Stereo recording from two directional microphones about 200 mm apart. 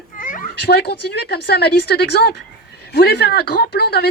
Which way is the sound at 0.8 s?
55° left (ahead or behind).